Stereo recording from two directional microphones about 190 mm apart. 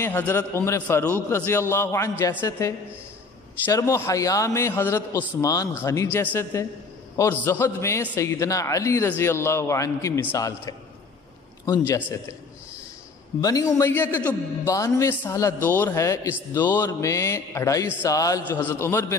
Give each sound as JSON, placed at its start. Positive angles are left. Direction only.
{"t": 0.0, "sound": "a man's voice", "side_deg": 10}
{"t": 13.4, "sound": "a man's voice", "side_deg": 20}